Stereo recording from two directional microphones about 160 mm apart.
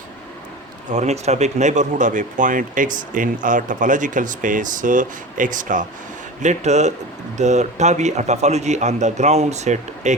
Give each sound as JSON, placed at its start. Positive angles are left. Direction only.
{"t": 0.9, "sound": "speech", "side_deg": -45}